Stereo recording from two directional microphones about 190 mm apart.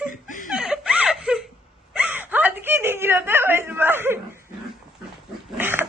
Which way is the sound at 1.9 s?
10° right (ahead or behind).